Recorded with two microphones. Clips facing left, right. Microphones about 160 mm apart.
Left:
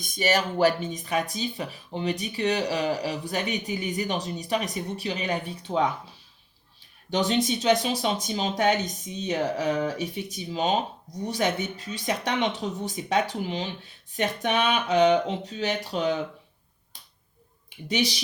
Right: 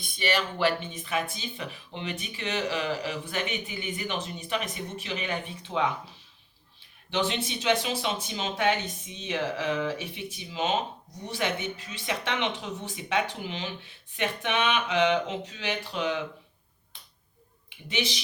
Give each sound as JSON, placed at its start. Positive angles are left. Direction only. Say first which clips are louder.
{"t": 0.0, "sound": "speech", "louder": "left 4 dB", "side_deg": 45}
{"t": 7.1, "sound": "speech", "louder": "left 5 dB", "side_deg": 40}
{"t": 17.8, "sound": "speech", "louder": "left 5 dB", "side_deg": 40}